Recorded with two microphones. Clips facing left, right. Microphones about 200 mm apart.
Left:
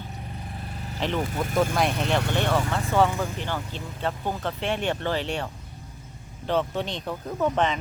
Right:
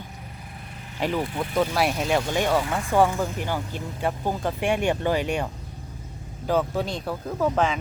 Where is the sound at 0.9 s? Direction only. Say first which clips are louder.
Right 1 dB; 10° right (ahead or behind).